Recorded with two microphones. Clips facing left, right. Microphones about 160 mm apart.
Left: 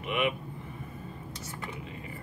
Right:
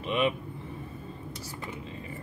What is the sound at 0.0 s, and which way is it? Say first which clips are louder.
Vehicle: right 2 dB; 30° right (ahead or behind).